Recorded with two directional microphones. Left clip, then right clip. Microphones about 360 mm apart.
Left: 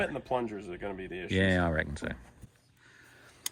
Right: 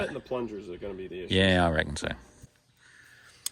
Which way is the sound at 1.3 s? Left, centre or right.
Centre.